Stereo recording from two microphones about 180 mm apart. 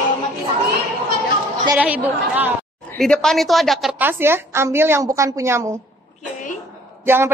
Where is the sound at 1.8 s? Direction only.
10° right (ahead or behind).